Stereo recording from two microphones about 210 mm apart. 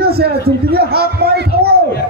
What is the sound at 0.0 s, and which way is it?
Speech, 50° right (ahead or behind).